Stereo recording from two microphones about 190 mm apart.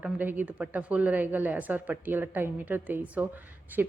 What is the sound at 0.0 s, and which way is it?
Speech, 10° right (ahead or behind).